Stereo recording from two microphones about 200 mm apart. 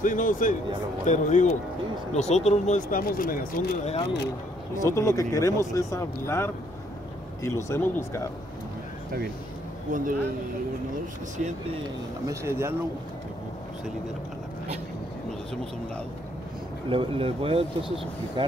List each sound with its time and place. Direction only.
0.0 s speech: 40° left (ahead or behind)
4.8 s speech: 15° left (ahead or behind)
9.8 s speech: 40° right (ahead or behind)
11.3 s speech: 35° right (ahead or behind)
12.3 s speech: 15° right (ahead or behind)
16.9 s speech: 25° right (ahead or behind)